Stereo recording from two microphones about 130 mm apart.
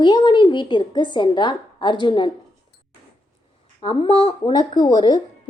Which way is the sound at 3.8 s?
40° left (ahead or behind).